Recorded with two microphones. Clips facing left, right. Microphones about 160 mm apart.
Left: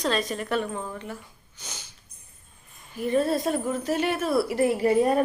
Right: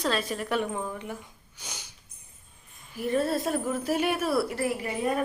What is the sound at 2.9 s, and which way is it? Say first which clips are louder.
Speech: left 3 dB; centre (ahead or behind).